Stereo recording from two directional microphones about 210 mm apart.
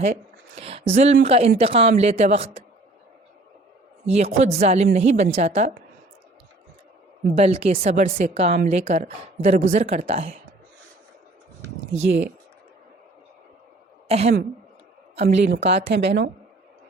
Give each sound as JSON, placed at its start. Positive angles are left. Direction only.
{"t": 0.0, "sound": "a sound", "side_deg": -30}
{"t": 0.9, "sound": "a man's voice", "side_deg": -35}
{"t": 4.0, "sound": "a man's voice", "side_deg": -30}
{"t": 7.3, "sound": "a man's voice", "side_deg": -30}
{"t": 14.1, "sound": "a woman's voice", "side_deg": -30}
{"t": 15.3, "sound": "speech", "side_deg": -55}